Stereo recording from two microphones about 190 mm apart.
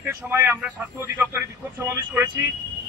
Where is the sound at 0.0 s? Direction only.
10° right (ahead or behind).